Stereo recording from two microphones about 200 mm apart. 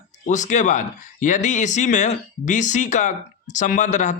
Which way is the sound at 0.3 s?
40° left (ahead or behind).